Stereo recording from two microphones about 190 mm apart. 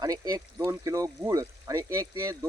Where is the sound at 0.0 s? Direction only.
20° right (ahead or behind).